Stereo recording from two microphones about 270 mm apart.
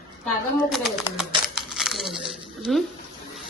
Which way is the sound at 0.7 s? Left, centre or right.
Centre.